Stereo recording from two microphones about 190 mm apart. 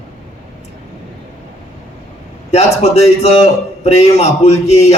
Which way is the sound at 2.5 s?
35° left (ahead or behind).